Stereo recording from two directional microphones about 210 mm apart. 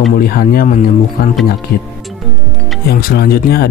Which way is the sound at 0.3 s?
45° left (ahead or behind).